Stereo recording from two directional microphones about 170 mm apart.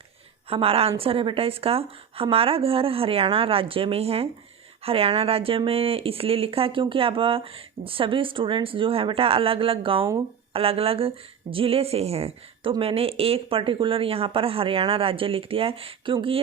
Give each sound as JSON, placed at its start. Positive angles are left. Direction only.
{"t": 0.5, "sound": "speech", "side_deg": -35}